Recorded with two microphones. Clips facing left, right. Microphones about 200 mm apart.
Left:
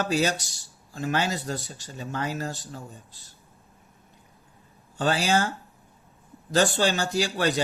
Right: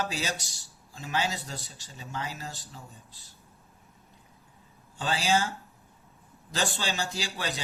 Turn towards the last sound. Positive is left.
turn(degrees=60)  # may be behind; listen again after turning